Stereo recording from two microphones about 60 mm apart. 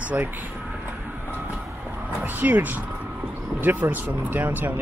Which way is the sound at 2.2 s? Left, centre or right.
Right.